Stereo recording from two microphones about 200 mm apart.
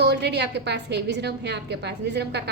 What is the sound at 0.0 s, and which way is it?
A woman's voice, 55° right (ahead or behind).